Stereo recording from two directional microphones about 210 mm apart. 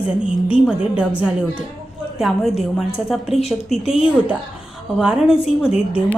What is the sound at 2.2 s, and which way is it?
A woman's voice, centre (ahead or behind).